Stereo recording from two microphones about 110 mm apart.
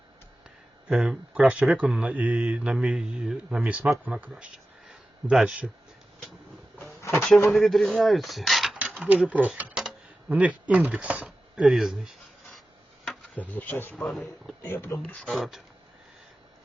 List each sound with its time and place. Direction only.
0.9 s speech: 5° right (ahead or behind)
6.8 s a sound: 25° left (ahead or behind)
7.2 s speech: 10° left (ahead or behind)
9.3 s speech: 15° right (ahead or behind)
11.3 s tick-tock: 5° right (ahead or behind)
13.3 s speech: 15° left (ahead or behind)
14.0 s speech: centre (ahead or behind)
14.6 s speech: 20° left (ahead or behind)
15.2 s speech: centre (ahead or behind)